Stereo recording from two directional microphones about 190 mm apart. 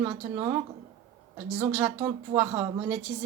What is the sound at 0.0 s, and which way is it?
A woman's voice, 15° right (ahead or behind).